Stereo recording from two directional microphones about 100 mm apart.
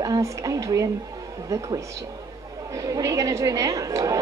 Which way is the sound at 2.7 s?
35° right (ahead or behind).